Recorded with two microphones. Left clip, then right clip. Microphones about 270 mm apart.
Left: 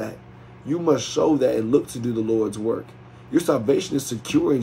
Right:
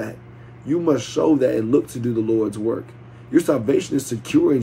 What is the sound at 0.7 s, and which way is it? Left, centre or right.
Speech, centre.